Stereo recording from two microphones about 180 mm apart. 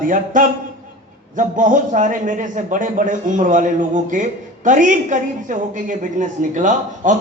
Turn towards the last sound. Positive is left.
turn(degrees=-45)  # may be behind; listen again after turning